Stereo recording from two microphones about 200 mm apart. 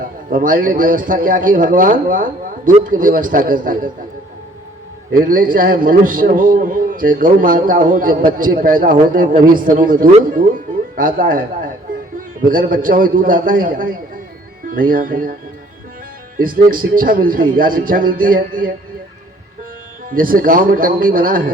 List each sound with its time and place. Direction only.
0.3 s a man's voice: 45° right (ahead or behind)
5.1 s a man's voice: 45° right (ahead or behind)
16.4 s a man's voice: 45° right (ahead or behind)
20.1 s a man's voice: 45° right (ahead or behind)